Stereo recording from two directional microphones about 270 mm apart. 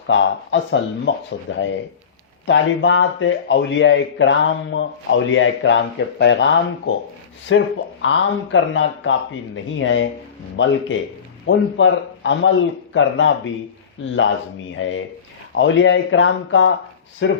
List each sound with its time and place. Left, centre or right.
0.1 s speech: left
14.8 s speech: left